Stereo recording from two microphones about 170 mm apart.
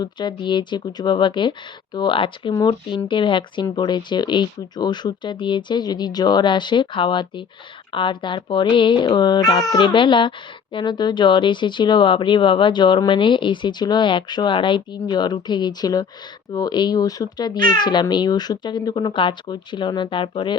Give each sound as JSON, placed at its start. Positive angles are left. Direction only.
{"t": 0.0, "sound": "speech", "side_deg": 25}